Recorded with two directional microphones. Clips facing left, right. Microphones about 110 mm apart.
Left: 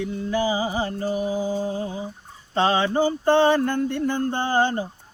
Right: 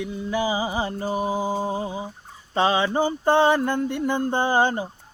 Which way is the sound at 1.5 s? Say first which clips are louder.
Even; 20° right (ahead or behind).